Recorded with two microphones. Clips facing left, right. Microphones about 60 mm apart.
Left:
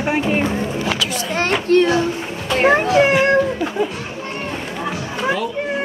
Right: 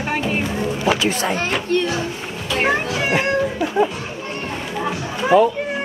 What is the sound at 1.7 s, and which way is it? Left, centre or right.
Speech, left.